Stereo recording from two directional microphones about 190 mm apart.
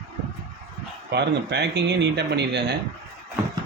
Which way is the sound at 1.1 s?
65° right (ahead or behind).